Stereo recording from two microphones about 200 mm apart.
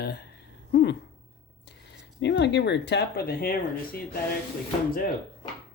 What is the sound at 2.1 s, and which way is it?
Speech, 60° left (ahead or behind).